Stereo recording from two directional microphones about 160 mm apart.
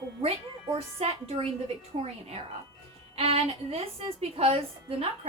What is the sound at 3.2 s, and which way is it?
Speech, 35° right (ahead or behind).